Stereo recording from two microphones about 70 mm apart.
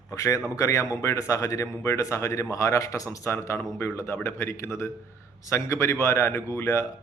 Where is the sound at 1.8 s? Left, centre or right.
Left.